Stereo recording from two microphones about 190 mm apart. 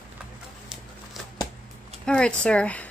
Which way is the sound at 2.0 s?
5° left (ahead or behind).